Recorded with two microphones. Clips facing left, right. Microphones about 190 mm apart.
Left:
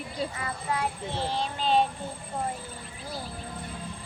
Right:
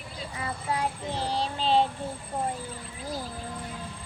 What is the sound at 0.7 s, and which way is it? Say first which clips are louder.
Child singing: right 1 dB; 35° right (ahead or behind).